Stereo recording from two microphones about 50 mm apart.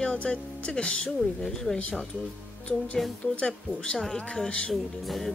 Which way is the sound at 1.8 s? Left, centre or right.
Left.